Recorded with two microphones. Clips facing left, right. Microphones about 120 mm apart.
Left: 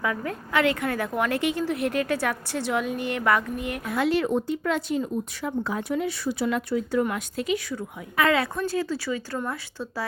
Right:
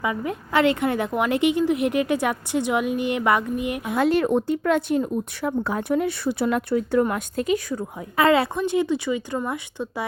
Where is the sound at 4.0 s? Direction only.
50° right (ahead or behind).